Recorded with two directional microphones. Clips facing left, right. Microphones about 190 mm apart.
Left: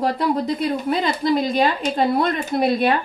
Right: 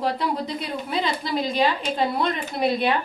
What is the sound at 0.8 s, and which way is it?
A woman's voice, 45° left (ahead or behind).